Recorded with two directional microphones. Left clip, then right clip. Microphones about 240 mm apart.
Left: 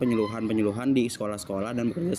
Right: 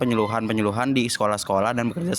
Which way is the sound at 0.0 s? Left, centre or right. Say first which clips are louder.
Right 4 dB; right.